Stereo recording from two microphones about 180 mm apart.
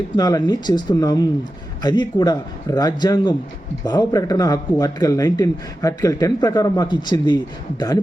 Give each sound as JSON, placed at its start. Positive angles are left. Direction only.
{"t": 0.2, "sound": "speech", "side_deg": 20}